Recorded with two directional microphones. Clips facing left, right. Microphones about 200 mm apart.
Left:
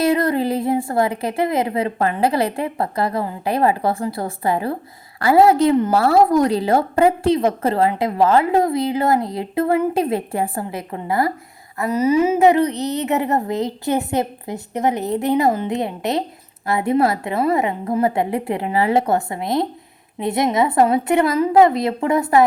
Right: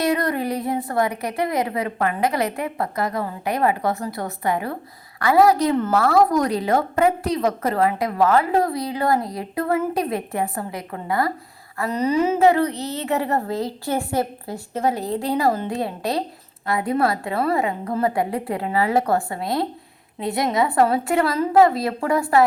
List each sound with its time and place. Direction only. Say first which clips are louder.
0.0 s a woman's voice: left 4 dB; 25° left (ahead or behind)
11.9 s a woman's voice: left 4 dB; 5° left (ahead or behind)